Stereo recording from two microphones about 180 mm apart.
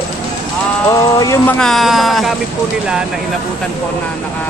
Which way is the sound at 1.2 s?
15° left (ahead or behind).